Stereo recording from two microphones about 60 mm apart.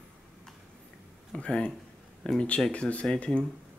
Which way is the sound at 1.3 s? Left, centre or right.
Centre.